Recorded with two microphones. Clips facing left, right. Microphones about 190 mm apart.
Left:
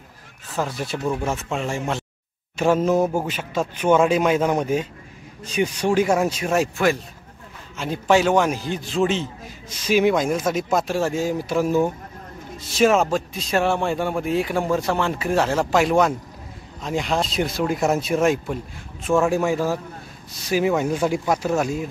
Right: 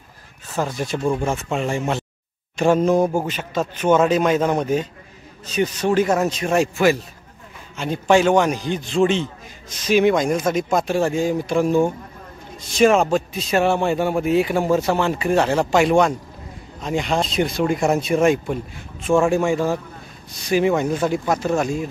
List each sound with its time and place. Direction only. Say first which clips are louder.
0.6 s a man's voice: right 2 dB; 5° left (ahead or behind)